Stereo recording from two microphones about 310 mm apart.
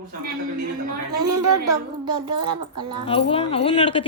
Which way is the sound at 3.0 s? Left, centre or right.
Centre.